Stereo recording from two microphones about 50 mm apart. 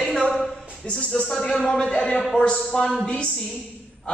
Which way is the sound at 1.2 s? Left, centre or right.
Centre.